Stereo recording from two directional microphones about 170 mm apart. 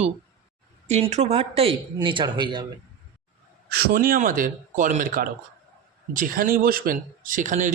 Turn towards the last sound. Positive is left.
turn(degrees=-50)  # may be behind; listen again after turning